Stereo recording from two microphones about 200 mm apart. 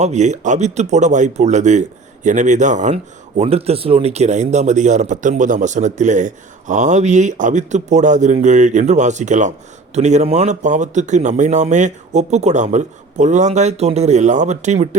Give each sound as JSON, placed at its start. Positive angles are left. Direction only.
{"t": 0.0, "sound": "speech", "side_deg": -35}